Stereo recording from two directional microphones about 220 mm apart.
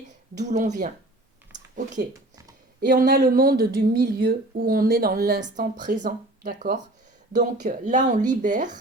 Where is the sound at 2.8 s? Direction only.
50° right (ahead or behind).